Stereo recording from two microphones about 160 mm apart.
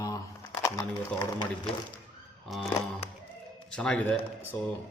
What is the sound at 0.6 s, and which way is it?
Speech, 25° left (ahead or behind).